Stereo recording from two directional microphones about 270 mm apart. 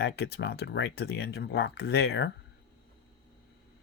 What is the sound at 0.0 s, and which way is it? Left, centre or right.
Speech, left.